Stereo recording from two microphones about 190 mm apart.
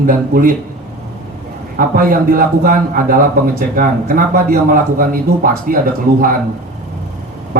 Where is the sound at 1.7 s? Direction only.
50° right (ahead or behind).